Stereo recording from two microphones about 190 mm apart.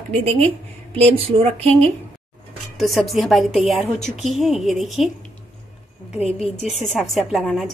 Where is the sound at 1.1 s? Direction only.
30° right (ahead or behind).